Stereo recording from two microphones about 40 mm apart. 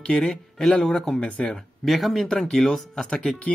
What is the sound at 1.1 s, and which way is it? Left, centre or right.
Speech, left.